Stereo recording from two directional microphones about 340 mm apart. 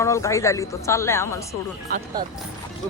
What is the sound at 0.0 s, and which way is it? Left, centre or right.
Speech, centre.